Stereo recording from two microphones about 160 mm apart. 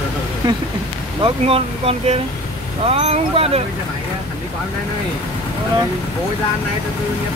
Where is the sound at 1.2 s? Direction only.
35° right (ahead or behind).